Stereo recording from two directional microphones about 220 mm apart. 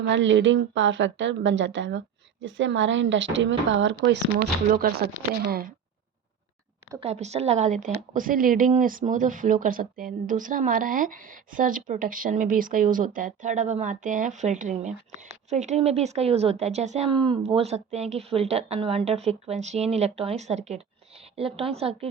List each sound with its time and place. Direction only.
0.1 s a woman's voice: 55° right (ahead or behind)
4.7 s speech: 40° right (ahead or behind)
7.0 s a woman's voice: 30° right (ahead or behind)